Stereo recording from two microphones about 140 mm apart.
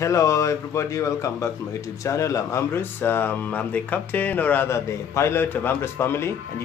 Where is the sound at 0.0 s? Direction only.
25° left (ahead or behind).